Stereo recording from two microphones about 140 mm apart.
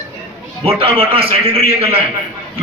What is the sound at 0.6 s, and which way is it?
A man's voice, 40° right (ahead or behind).